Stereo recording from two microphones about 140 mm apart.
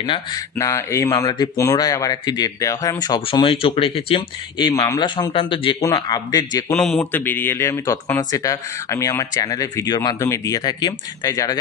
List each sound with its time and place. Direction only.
0.0 s speech: 40° left (ahead or behind)
0.6 s speech: 20° left (ahead or behind)
3.3 s speech: 40° left (ahead or behind)
5.8 s speech: 25° left (ahead or behind)
6.8 s speech: 10° left (ahead or behind); by 11.5 s 25° left (ahead or behind)